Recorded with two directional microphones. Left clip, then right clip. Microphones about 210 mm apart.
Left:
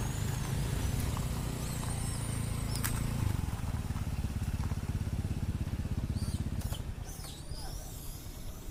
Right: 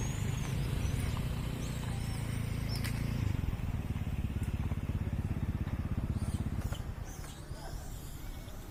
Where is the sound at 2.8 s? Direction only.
35° left (ahead or behind).